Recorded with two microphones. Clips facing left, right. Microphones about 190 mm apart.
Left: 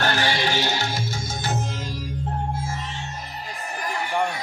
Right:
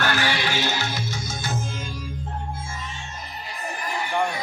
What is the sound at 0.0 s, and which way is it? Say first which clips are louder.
Music: left 1 dB; 30° left (ahead or behind).